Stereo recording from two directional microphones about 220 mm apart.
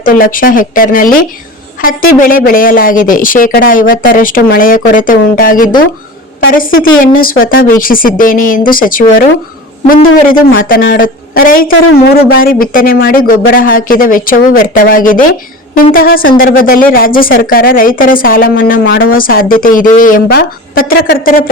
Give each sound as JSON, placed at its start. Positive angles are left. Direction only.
{"t": 0.0, "sound": "speech", "side_deg": 40}
{"t": 11.7, "sound": "speech", "side_deg": 60}
{"t": 12.4, "sound": "speech", "side_deg": 40}
{"t": 18.9, "sound": "speech", "side_deg": 60}
{"t": 19.1, "sound": "speech", "side_deg": 40}